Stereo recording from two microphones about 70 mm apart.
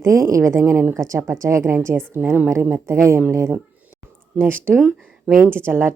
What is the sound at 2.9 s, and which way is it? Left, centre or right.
Speech, right.